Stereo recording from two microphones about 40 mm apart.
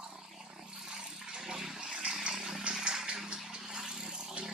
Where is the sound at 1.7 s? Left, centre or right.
Right.